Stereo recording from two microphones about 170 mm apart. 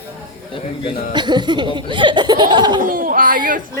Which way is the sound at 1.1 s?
25° right (ahead or behind).